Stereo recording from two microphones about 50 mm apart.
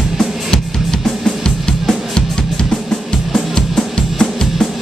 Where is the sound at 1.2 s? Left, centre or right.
Centre.